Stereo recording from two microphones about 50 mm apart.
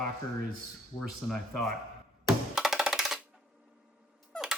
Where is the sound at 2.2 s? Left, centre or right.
Centre.